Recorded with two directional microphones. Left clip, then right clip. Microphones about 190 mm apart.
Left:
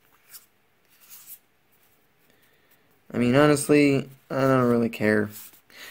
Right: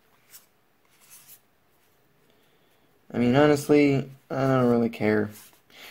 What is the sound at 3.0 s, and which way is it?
Speech, 25° left (ahead or behind).